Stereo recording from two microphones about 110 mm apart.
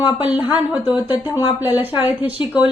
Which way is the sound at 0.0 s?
15° right (ahead or behind).